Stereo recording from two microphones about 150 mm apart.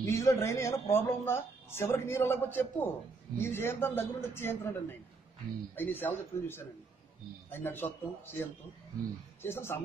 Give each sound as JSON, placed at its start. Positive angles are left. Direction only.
{"t": 0.0, "sound": "speech", "side_deg": 20}